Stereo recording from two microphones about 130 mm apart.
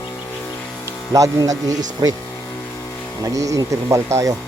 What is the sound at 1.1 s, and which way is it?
Speech, 25° right (ahead or behind).